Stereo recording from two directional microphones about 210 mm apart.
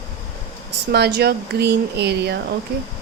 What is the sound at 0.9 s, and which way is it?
Speech, 50° right (ahead or behind).